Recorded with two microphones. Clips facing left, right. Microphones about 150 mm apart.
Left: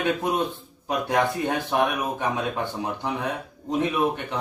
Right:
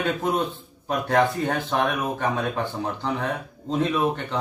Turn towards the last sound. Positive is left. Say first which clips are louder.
# right 1 dB
turn(degrees=10)  # may be behind; listen again after turning